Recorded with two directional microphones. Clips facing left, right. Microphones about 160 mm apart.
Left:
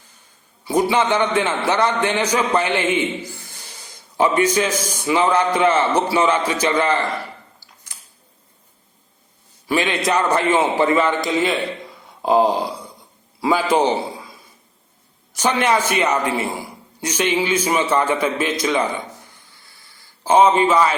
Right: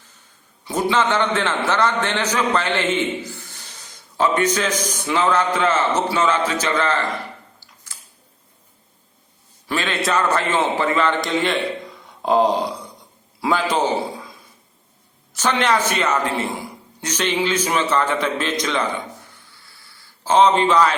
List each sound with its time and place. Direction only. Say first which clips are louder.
0.6 s a man's voice: left 2 dB; 10° left (ahead or behind)
7.9 s tick-tock: right 1 dB; 20° left (ahead or behind)
9.6 s a man's voice: left 3 dB; 15° left (ahead or behind)
12.2 s a sound: left 1 dB; 5° left (ahead or behind)
13.4 s a man's voice: left 3 dB; 10° left (ahead or behind)
15.3 s a man's voice: left 1 dB; 10° left (ahead or behind)
20.2 s a man's voice: left 1 dB; 10° left (ahead or behind)